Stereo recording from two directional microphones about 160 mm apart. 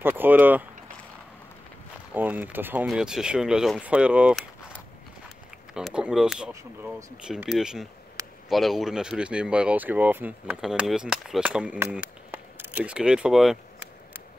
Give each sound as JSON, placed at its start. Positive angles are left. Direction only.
{"t": 0.0, "sound": "speech", "side_deg": -10}
{"t": 2.1, "sound": "speech", "side_deg": -10}
{"t": 5.8, "sound": "speech", "side_deg": -5}
{"t": 6.5, "sound": "speech", "side_deg": -20}
{"t": 7.2, "sound": "speech", "side_deg": -5}